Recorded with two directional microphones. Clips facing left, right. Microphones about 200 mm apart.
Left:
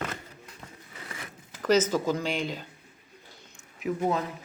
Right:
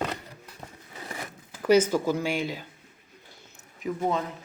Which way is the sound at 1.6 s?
10° right (ahead or behind).